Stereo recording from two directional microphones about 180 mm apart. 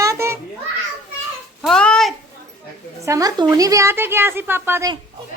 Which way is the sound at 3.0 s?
20° right (ahead or behind).